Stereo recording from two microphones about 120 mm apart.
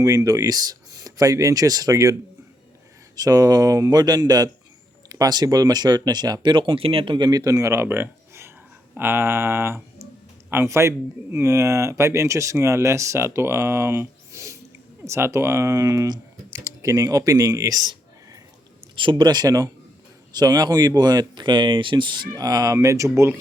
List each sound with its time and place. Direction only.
0.0 s speech: 30° right (ahead or behind)
3.2 s speech: 30° right (ahead or behind)
18.9 s speech: 40° right (ahead or behind); by 23.3 s 25° right (ahead or behind)